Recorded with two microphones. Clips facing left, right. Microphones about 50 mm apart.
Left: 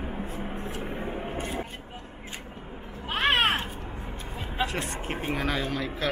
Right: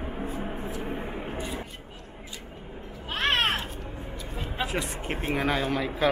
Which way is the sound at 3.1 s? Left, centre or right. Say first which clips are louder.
Left 2 dB; centre.